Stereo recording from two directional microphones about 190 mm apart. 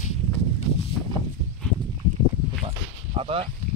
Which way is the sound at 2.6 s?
30° right (ahead or behind).